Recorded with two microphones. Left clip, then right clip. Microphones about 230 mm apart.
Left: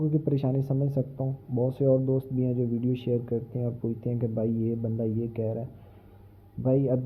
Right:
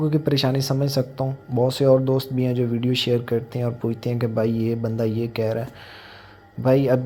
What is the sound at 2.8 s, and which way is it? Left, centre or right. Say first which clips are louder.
Speech: right 8 dB; centre.